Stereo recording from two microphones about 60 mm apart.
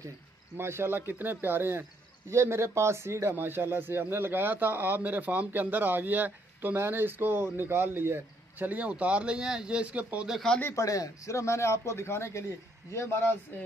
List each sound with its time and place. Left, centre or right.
0.6 s speech: right
8.5 s speech: right
10.7 s a man's voice: left